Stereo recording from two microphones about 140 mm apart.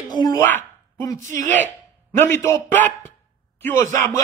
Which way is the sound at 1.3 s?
65° right (ahead or behind).